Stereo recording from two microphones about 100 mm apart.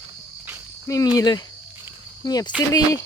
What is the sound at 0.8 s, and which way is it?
Speech, 35° left (ahead or behind).